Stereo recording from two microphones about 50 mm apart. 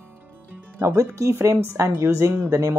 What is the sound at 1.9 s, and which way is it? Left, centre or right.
Speech, right.